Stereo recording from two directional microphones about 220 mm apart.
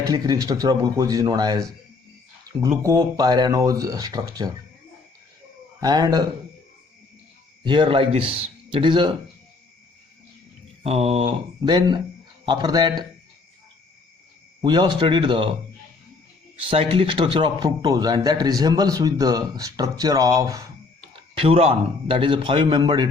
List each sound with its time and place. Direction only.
0.1 s a man's voice: 15° right (ahead or behind)
5.8 s a man's voice: 15° right (ahead or behind)
7.6 s a man's voice: 20° right (ahead or behind)
10.8 s a man's voice: 30° right (ahead or behind)
14.6 s a man's voice: 20° right (ahead or behind)
16.6 s a man's voice: 25° right (ahead or behind)
21.3 s a man's voice: 25° right (ahead or behind)